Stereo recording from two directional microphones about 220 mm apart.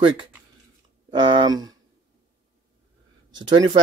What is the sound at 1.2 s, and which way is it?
Speech, 20° right (ahead or behind).